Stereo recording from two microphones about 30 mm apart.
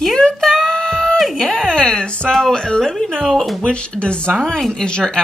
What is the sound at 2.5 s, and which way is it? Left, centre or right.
Speech, left.